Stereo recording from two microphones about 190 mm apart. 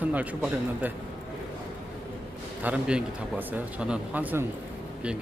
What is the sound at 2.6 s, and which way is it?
A man's voice, 5° right (ahead or behind).